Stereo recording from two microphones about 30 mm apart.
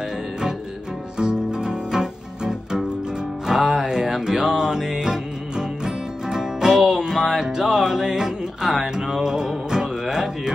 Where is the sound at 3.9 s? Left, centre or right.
Right.